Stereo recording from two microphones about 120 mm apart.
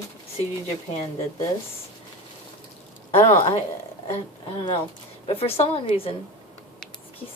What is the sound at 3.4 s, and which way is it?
Speech, 60° left (ahead or behind).